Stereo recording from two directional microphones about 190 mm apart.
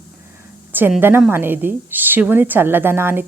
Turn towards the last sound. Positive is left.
turn(degrees=-10)  # may be behind; listen again after turning